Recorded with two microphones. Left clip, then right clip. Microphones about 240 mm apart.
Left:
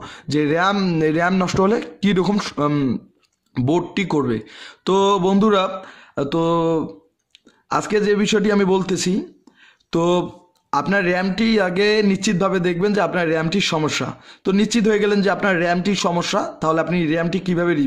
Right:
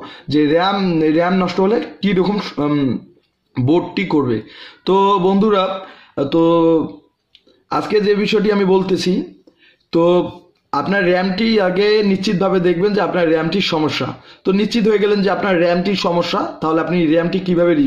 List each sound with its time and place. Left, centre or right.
0.0 s a man's voice: left